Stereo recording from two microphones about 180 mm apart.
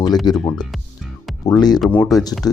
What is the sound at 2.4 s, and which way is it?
Speech, 20° left (ahead or behind).